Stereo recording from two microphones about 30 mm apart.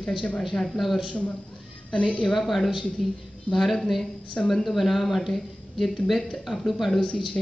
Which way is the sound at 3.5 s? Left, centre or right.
Centre.